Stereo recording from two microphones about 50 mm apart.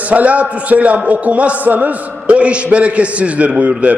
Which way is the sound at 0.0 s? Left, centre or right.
Right.